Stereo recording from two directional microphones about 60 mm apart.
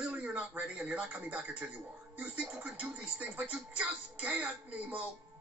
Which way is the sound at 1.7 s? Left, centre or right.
Right.